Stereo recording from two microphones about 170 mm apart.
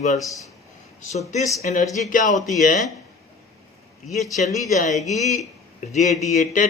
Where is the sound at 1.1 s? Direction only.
40° left (ahead or behind).